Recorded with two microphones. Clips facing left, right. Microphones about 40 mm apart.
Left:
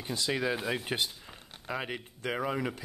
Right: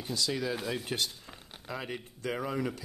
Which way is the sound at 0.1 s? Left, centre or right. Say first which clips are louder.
Left 2 dB; left.